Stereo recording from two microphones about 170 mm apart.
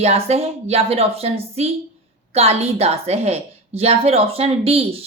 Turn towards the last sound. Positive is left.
turn(degrees=-35)  # may be behind; listen again after turning